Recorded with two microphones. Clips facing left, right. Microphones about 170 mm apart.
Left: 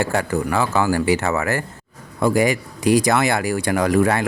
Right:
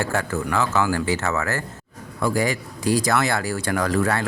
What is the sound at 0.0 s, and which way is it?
Speech, 15° left (ahead or behind).